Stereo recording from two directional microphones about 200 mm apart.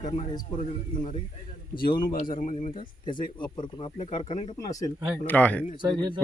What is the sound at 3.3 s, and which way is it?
Speech, 20° left (ahead or behind).